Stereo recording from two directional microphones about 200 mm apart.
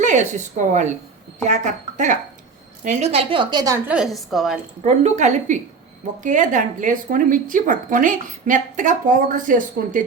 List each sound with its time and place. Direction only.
0.0 s a woman's voice: 40° right (ahead or behind); by 3.8 s 20° right (ahead or behind)
3.8 s a woman's voice: 5° right (ahead or behind)
4.8 s a woman's voice: 35° right (ahead or behind)